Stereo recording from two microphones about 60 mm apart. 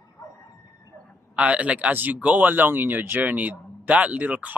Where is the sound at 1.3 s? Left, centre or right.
Right.